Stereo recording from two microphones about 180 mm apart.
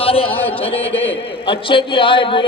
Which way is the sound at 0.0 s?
30° left (ahead or behind).